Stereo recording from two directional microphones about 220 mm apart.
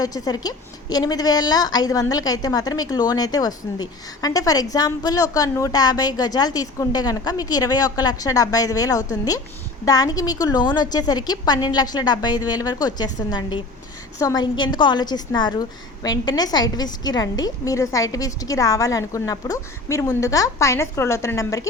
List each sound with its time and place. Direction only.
0.0 s a woman's voice: 15° left (ahead or behind)